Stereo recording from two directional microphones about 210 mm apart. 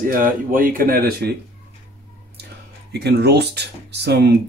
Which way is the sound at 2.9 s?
50° right (ahead or behind).